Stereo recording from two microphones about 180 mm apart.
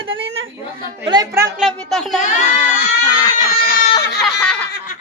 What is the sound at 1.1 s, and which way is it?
Speech, 15° right (ahead or behind).